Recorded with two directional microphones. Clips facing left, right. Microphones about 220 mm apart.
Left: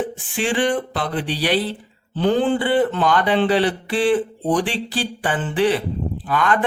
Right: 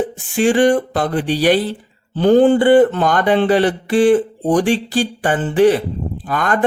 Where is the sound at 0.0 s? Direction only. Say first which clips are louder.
Right 7 dB; 45° right (ahead or behind).